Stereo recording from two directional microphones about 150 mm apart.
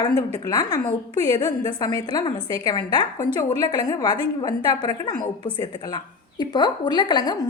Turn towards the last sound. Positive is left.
turn(degrees=25)  # may be behind; listen again after turning